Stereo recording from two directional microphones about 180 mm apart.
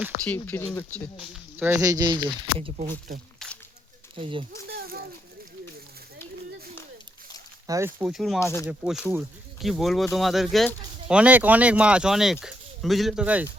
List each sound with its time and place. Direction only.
0.3 s speech: 10° left (ahead or behind)
1.3 s speech: 10° right (ahead or behind); by 2.7 s 30° right (ahead or behind)
4.1 s speech: 30° right (ahead or behind)
4.7 s a sound: 55° right (ahead or behind)
7.7 s speech: 15° right (ahead or behind)
8.4 s speech: 15° left (ahead or behind)
8.6 s speech: 5° right (ahead or behind)